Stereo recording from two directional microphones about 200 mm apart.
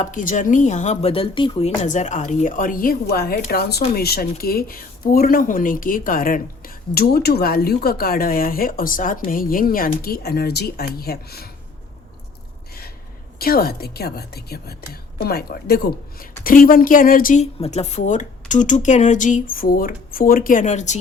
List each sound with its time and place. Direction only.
0.0 s speech: 40° left (ahead or behind)
13.4 s a woman's voice: 50° left (ahead or behind)